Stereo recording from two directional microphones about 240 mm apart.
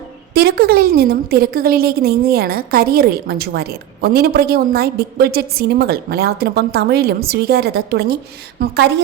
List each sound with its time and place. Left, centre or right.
0.3 s a woman's voice: right